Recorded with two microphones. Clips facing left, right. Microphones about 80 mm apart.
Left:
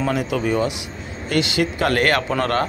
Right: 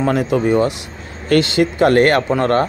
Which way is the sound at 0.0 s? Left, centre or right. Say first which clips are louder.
Right 5 dB; right.